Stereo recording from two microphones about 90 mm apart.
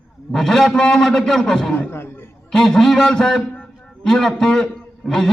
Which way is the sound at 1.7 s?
20° left (ahead or behind).